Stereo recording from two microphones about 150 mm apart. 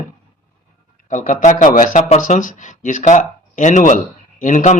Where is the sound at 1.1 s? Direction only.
60° left (ahead or behind).